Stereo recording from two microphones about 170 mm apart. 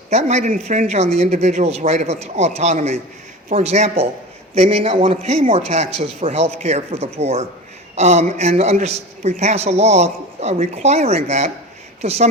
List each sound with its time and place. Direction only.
0.1 s a man's voice: 40° right (ahead or behind)